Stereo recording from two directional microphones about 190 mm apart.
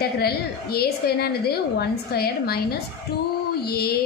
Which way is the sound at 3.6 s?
55° left (ahead or behind).